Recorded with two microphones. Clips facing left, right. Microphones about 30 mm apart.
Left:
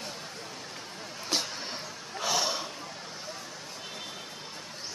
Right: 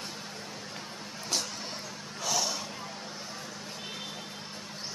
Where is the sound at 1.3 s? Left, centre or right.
Left.